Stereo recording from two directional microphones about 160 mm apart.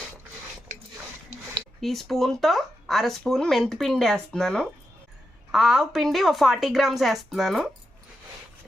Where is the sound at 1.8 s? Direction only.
Centre (ahead or behind).